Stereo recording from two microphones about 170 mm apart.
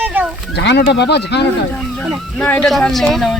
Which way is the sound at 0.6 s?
90° left.